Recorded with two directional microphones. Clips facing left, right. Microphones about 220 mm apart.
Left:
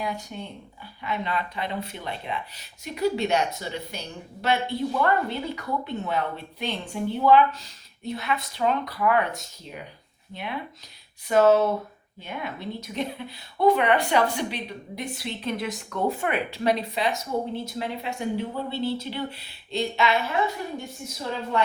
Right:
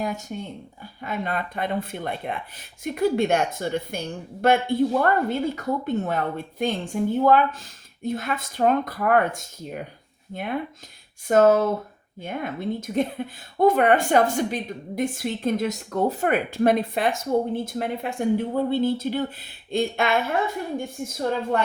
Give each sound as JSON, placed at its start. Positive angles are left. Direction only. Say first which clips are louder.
{"t": 0.0, "sound": "a woman's voice", "louder": "right 3 dB", "side_deg": -45}